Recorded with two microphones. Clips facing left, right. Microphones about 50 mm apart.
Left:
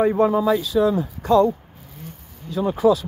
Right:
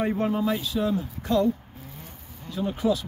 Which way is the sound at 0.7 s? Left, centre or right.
Left.